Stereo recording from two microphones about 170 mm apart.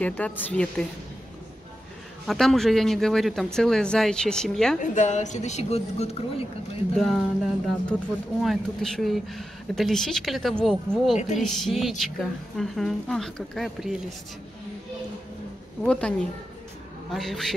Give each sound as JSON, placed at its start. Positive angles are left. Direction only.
{"t": 0.0, "sound": "a woman's voice", "side_deg": 10}
{"t": 2.2, "sound": "speech", "side_deg": 0}
{"t": 4.7, "sound": "a woman's voice", "side_deg": 45}
{"t": 7.0, "sound": "speech", "side_deg": 0}
{"t": 11.1, "sound": "a woman's voice", "side_deg": 45}
{"t": 11.4, "sound": "speech", "side_deg": 0}
{"t": 15.8, "sound": "speech", "side_deg": 5}